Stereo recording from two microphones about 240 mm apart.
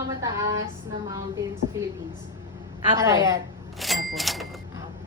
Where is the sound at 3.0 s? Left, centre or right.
Centre.